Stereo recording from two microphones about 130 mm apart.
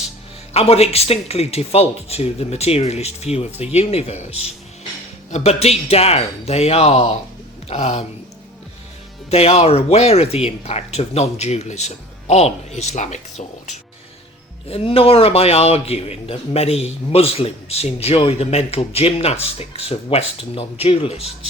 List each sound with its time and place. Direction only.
0.5 s a man's voice: 50° left (ahead or behind)
9.3 s speech: 50° left (ahead or behind)
14.7 s a man's voice: 45° left (ahead or behind)